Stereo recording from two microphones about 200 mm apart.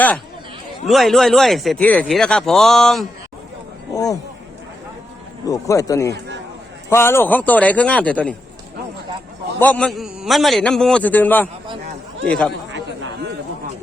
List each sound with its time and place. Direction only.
0.9 s speech: centre (ahead or behind)
3.9 s speech: 20° left (ahead or behind)
5.5 s a man's voice: 15° left (ahead or behind)
9.6 s speech: 5° left (ahead or behind)